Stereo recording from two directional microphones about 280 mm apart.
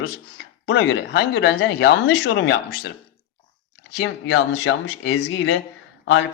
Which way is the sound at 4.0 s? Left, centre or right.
Left.